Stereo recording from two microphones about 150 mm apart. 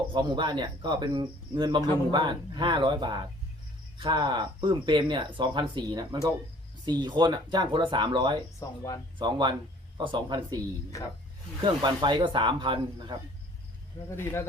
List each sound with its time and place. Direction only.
0.1 s speech: 30° right (ahead or behind)
8.5 s speech: 20° left (ahead or behind)
9.1 s speech: 30° right (ahead or behind)
11.6 s speech: 30° right (ahead or behind)
14.2 s speech: 15° left (ahead or behind)